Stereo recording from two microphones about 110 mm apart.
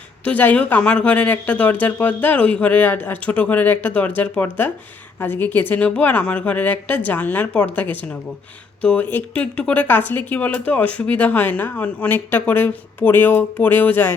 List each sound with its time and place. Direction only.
0.3 s speech: 15° left (ahead or behind)